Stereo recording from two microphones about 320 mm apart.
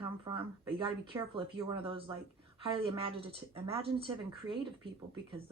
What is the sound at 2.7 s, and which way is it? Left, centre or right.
Speech, centre.